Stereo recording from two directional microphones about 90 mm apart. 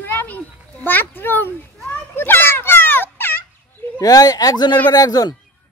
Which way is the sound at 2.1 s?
25° left (ahead or behind).